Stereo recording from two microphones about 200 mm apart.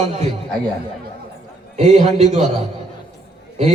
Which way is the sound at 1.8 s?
35° right (ahead or behind).